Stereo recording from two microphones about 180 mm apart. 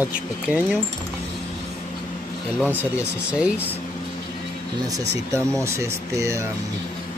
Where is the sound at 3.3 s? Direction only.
5° right (ahead or behind).